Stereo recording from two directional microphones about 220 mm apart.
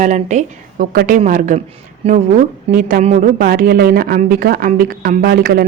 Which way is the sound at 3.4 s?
45° right (ahead or behind).